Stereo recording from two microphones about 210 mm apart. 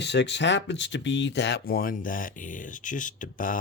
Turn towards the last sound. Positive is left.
turn(degrees=40)  # may be behind; listen again after turning